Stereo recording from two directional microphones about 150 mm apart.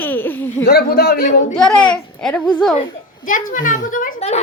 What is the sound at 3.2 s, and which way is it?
Speech, 60° left (ahead or behind).